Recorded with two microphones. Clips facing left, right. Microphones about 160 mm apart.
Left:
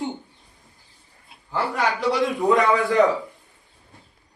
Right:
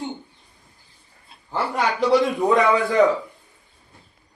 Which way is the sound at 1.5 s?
20° right (ahead or behind).